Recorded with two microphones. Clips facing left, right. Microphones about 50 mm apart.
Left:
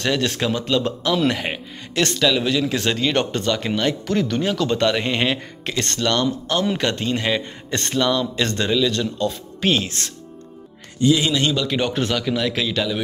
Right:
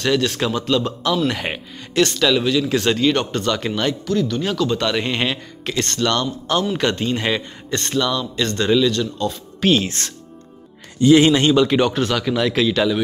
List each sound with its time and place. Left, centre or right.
0.0 s speech: centre
0.4 s speech: centre
2.4 s speech: centre
2.7 s speech: centre
4.1 s speech: left
4.4 s speech: centre
4.8 s speech: centre
7.7 s speech: centre
11.1 s speech: right
11.4 s speech: right
11.8 s speech: centre
12.2 s speech: centre